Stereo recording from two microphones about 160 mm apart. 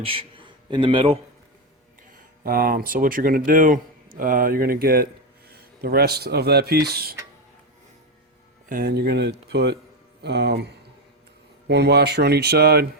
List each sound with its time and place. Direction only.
0.0 s a man's voice: 35° right (ahead or behind)
2.4 s speech: 65° right (ahead or behind)
8.7 s speech: 75° right (ahead or behind)